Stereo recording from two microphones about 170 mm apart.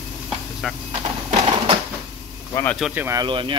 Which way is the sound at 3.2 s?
30° right (ahead or behind).